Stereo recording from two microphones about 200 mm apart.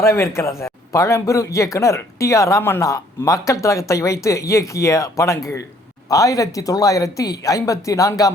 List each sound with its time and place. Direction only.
0.0 s speech: 15° left (ahead or behind)